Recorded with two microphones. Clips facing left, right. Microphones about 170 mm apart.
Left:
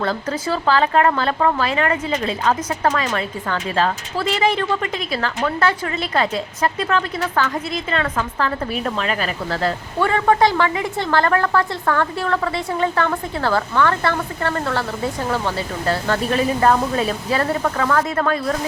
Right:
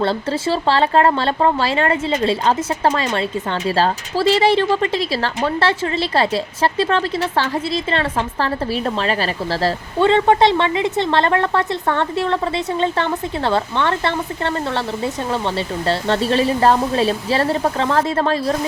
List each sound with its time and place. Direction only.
0.0 s a woman's voice: 30° right (ahead or behind)